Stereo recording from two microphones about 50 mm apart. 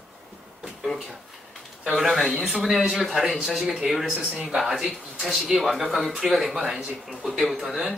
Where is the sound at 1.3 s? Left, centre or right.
Centre.